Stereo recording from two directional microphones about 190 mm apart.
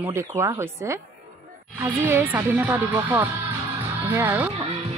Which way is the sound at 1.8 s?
15° right (ahead or behind).